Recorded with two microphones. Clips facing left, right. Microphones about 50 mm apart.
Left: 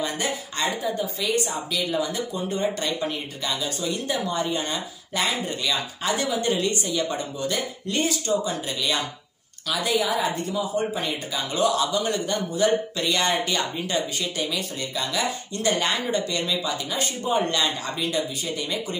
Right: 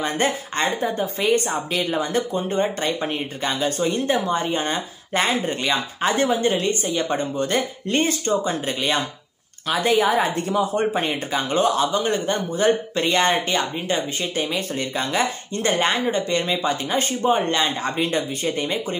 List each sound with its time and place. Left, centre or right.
0.0 s a woman's voice: right
17.9 s a woman's voice: right